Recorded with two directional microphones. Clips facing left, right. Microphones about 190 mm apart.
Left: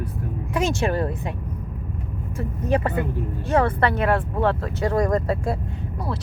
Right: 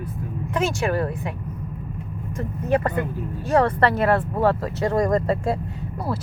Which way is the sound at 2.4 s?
10° left (ahead or behind).